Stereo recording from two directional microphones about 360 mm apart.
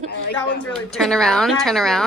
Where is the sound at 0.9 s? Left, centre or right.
Centre.